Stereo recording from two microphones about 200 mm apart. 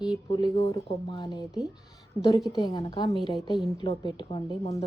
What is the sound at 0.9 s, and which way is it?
Speech, 20° left (ahead or behind).